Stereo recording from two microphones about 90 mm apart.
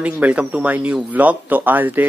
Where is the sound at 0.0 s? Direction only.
15° right (ahead or behind).